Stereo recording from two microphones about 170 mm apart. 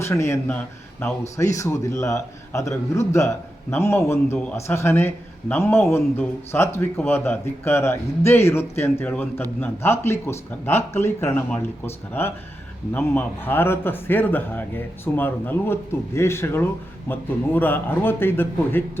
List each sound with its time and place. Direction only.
0.1 s a man's voice: 15° left (ahead or behind)